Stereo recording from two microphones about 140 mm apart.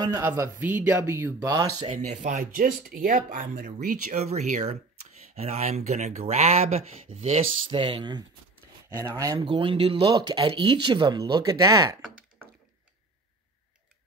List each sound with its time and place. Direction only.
0.2 s speech: 15° right (ahead or behind)
1.9 s speech: 75° right (ahead or behind); by 7.8 s 50° right (ahead or behind)
7.8 s speech: 35° right (ahead or behind)